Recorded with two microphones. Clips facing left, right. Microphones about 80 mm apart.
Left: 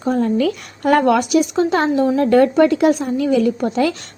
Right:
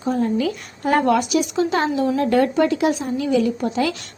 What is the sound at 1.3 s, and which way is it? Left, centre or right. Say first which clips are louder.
Speech: left 4 dB; left.